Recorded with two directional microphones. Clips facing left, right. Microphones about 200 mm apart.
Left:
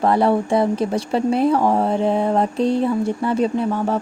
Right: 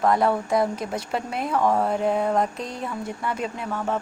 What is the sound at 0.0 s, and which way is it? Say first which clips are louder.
Speech: left 4 dB; 30° left (ahead or behind).